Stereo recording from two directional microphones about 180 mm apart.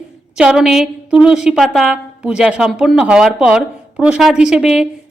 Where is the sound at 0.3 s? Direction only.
5° right (ahead or behind).